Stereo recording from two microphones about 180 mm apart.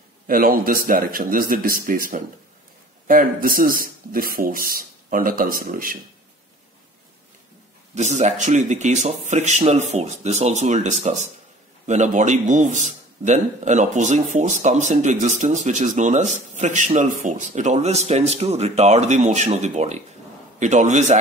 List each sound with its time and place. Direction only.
0.3 s speech: 50° right (ahead or behind)
7.9 s a man's voice: 40° right (ahead or behind)